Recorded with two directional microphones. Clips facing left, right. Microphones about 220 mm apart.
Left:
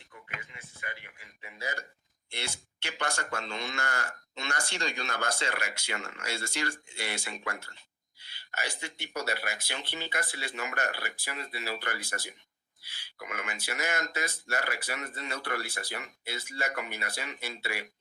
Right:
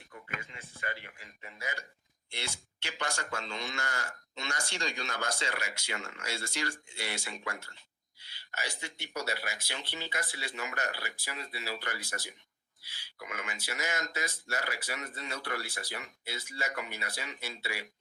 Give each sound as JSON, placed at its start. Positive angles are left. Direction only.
{"t": 0.3, "sound": "speech", "side_deg": 15}
{"t": 1.5, "sound": "speech", "side_deg": 35}
{"t": 2.3, "sound": "speech", "side_deg": 60}